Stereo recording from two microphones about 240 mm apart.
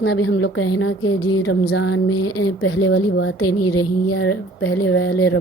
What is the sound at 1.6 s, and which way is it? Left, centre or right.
A woman's voice, left.